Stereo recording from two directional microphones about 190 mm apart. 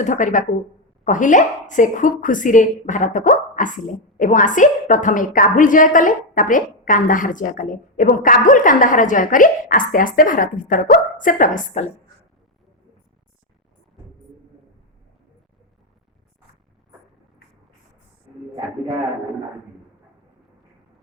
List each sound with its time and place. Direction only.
0.0 s a woman's voice: 40° left (ahead or behind)